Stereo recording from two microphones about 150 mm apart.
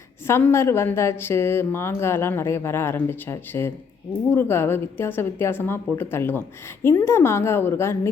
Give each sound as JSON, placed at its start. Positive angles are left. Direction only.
{"t": 0.3, "sound": "a woman's voice", "side_deg": 15}